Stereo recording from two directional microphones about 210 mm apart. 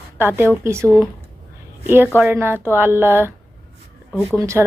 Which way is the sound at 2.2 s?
10° right (ahead or behind).